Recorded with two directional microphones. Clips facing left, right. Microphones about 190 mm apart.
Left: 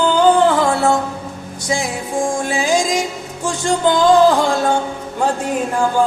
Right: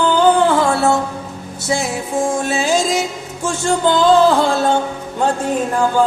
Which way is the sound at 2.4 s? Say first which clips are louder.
Even; 15° left (ahead or behind).